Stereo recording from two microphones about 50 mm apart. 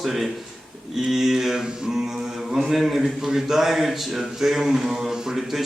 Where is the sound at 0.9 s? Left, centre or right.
Centre.